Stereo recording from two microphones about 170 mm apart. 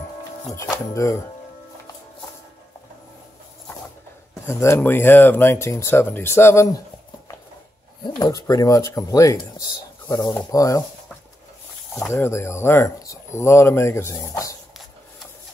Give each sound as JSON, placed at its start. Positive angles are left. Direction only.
{"t": 0.6, "sound": "speech", "side_deg": 20}
{"t": 4.5, "sound": "speech", "side_deg": 15}
{"t": 8.0, "sound": "rub", "side_deg": 20}
{"t": 12.1, "sound": "speech", "side_deg": 15}